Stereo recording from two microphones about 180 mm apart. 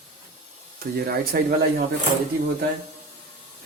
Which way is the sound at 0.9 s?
60° right (ahead or behind).